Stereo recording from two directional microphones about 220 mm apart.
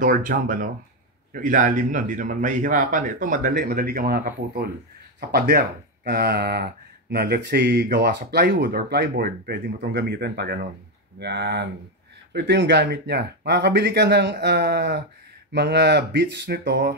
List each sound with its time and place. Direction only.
0.0 s speech: 40° right (ahead or behind)